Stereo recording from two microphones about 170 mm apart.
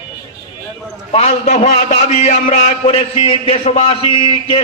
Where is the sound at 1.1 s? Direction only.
35° left (ahead or behind).